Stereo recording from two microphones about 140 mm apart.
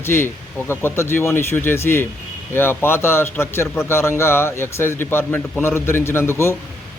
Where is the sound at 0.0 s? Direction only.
15° left (ahead or behind).